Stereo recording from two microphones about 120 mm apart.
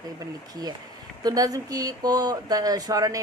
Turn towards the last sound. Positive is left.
turn(degrees=-30)  # may be behind; listen again after turning